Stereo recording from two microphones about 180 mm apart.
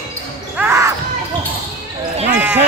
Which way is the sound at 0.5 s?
10° right (ahead or behind).